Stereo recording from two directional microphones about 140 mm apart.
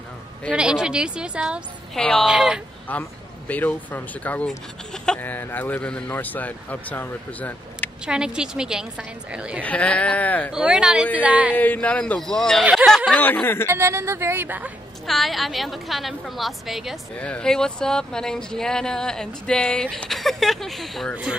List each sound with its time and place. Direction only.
0.5 s a woman's voice: 5° right (ahead or behind)
2.0 s speech: 5° left (ahead or behind)
2.9 s speech: 10° left (ahead or behind)
8.0 s speech: 5° right (ahead or behind)
9.6 s speech: 10° left (ahead or behind)
10.5 s a woman's voice: 5° right (ahead or behind)
11.5 s speech: 10° left (ahead or behind)
13.2 s speech: 15° left (ahead or behind)
13.7 s a woman's voice: 20° right (ahead or behind)
15.0 s speech: centre (ahead or behind)